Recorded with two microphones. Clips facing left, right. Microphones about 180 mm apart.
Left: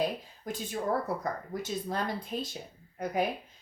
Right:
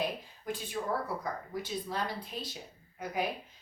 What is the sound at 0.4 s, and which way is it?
Speech, 45° left (ahead or behind).